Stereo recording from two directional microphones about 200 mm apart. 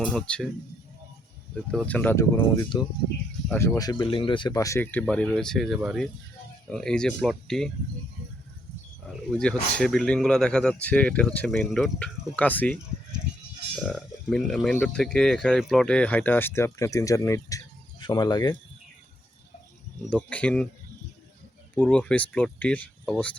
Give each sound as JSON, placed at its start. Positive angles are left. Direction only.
{"t": 0.0, "sound": "speech", "side_deg": 5}
{"t": 1.7, "sound": "speech", "side_deg": 5}
{"t": 9.3, "sound": "speech", "side_deg": 5}
{"t": 20.1, "sound": "speech", "side_deg": 5}
{"t": 21.8, "sound": "speech", "side_deg": 5}